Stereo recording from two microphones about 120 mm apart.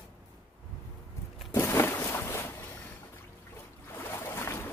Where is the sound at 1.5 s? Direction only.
20° left (ahead or behind).